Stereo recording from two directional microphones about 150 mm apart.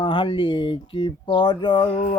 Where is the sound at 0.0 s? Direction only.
30° left (ahead or behind).